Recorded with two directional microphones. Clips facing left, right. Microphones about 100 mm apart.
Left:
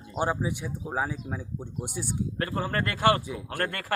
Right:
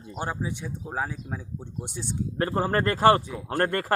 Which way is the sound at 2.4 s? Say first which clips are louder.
Right 6 dB; 35° right (ahead or behind).